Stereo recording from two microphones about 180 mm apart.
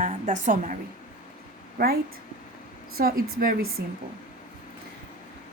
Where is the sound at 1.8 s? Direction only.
60° right (ahead or behind).